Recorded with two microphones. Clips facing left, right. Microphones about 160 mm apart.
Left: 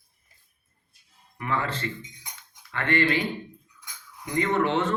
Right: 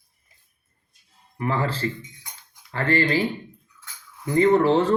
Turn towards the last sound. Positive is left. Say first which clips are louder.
# right 7 dB
turn(degrees=-35)  # may be behind; listen again after turning